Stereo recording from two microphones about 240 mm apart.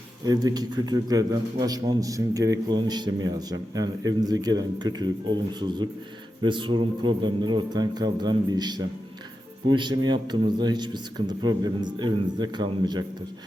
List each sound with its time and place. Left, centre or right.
0.3 s a man's voice: centre